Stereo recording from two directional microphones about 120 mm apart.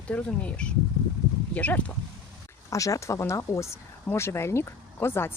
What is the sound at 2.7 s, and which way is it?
Speech, 25° left (ahead or behind).